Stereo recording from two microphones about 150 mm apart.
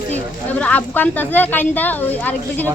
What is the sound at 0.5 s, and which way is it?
Speech, 10° left (ahead or behind).